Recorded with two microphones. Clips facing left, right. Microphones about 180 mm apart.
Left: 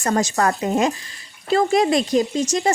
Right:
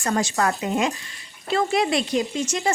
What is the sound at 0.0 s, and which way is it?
Speech, 40° left (ahead or behind).